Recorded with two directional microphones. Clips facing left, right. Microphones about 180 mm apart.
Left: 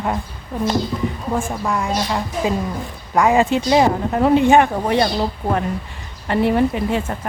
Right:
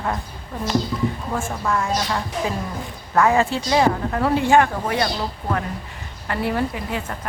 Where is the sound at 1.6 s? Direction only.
15° left (ahead or behind).